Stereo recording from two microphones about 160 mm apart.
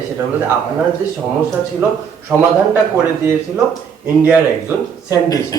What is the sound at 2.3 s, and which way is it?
Speech, 10° right (ahead or behind).